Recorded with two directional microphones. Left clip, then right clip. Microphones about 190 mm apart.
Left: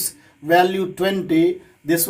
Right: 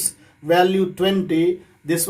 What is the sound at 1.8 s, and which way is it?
Speech, 50° left (ahead or behind).